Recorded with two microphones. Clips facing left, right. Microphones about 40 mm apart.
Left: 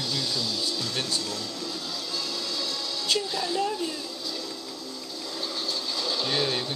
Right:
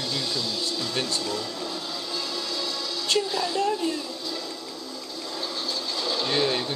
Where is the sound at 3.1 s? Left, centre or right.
Centre.